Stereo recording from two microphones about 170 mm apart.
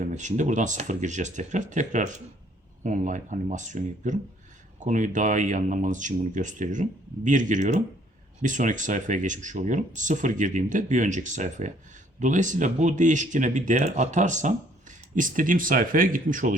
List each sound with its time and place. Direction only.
0.0 s speech: 45° right (ahead or behind)